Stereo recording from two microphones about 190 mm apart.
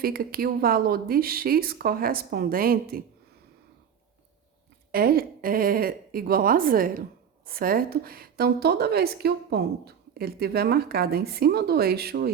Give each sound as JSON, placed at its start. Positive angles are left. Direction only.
{"t": 0.0, "sound": "speech", "side_deg": -50}
{"t": 4.9, "sound": "a woman's voice", "side_deg": -50}